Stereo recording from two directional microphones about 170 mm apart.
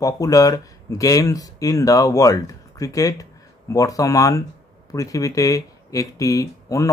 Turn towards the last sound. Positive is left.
turn(degrees=20)  # may be behind; listen again after turning